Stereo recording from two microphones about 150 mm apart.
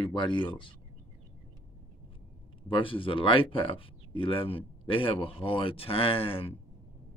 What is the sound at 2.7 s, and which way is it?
Speech, 35° left (ahead or behind).